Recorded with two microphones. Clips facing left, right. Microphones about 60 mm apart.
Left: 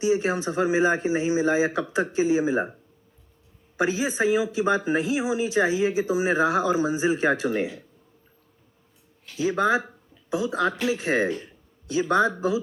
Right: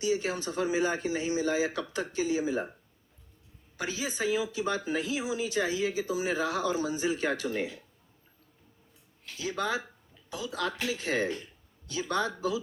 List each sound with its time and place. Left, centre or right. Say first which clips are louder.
0.0 s speech: left 7 dB; left
3.8 s speech: left 9 dB; left
9.4 s speech: left 9 dB; left